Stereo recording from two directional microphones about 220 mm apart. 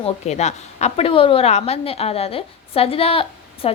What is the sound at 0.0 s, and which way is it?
A woman's voice, 30° left (ahead or behind).